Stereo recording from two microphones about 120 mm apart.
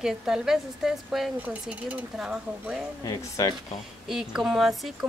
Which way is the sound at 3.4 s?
30° left (ahead or behind).